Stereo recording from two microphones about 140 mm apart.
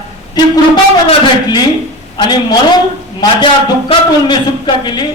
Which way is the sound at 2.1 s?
30° left (ahead or behind).